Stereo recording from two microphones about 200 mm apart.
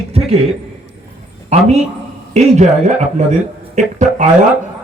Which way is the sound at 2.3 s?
35° right (ahead or behind).